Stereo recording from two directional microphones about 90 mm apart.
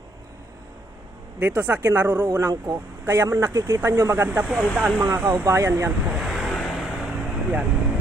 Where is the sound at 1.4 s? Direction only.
20° right (ahead or behind).